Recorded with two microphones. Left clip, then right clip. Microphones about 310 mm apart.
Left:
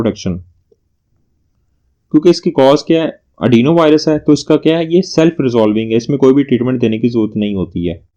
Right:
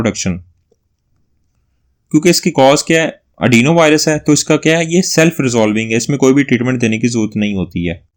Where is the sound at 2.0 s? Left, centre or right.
Right.